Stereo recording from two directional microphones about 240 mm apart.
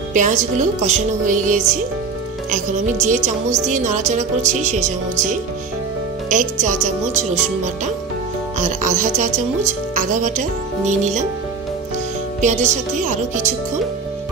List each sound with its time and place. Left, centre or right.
0.1 s a woman's voice: right
12.4 s a woman's voice: right